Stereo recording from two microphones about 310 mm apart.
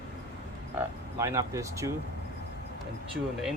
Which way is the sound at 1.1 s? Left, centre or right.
Centre.